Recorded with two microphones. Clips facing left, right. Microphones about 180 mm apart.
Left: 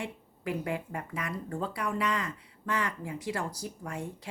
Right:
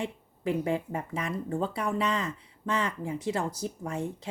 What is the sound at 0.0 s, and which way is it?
Speech, 25° right (ahead or behind).